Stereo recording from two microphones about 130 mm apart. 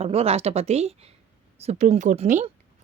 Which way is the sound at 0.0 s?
50° right (ahead or behind).